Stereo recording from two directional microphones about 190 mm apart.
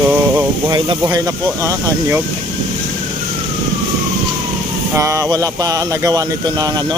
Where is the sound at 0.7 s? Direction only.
20° right (ahead or behind).